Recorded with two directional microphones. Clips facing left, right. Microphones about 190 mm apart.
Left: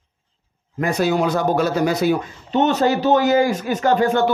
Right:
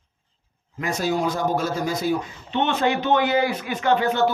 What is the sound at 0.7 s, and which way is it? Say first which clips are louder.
Speech: left 5 dB; 60° left (ahead or behind).